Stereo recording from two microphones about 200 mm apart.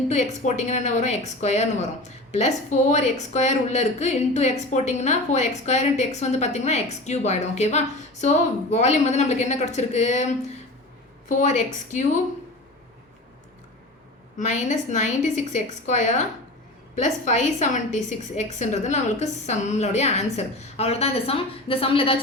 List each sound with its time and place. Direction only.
0.4 s a woman's voice: 35° left (ahead or behind)
14.3 s a woman's voice: 35° left (ahead or behind)